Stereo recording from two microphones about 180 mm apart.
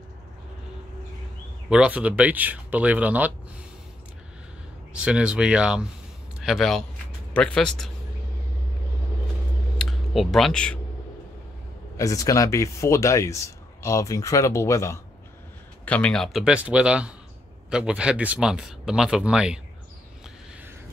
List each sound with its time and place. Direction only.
1.7 s speech: 5° right (ahead or behind)
4.9 s speech: 5° right (ahead or behind)
9.8 s speech: centre (ahead or behind)
12.0 s speech: 20° left (ahead or behind); by 19.6 s 5° right (ahead or behind)